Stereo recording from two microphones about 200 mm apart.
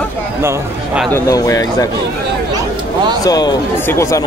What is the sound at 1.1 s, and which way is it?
Speech, 15° left (ahead or behind).